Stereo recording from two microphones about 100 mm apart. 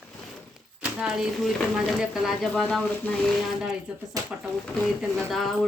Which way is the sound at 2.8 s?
15° left (ahead or behind).